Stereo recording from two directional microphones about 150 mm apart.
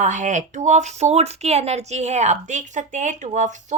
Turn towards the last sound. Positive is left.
turn(degrees=-55)  # may be behind; listen again after turning